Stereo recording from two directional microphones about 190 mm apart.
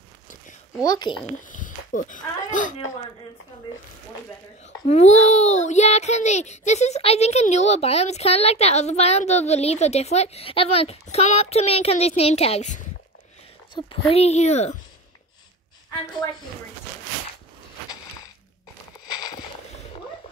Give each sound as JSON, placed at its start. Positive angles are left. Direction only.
{"t": 0.8, "sound": "speech", "side_deg": 20}
{"t": 1.5, "sound": "speech", "side_deg": 45}
{"t": 4.8, "sound": "a child's voice", "side_deg": 35}
{"t": 13.8, "sound": "a child's voice", "side_deg": 35}
{"t": 19.0, "sound": "a sound", "side_deg": 20}